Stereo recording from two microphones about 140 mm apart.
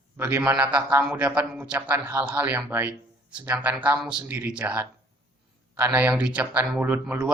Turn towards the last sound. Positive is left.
turn(degrees=-15)  # may be behind; listen again after turning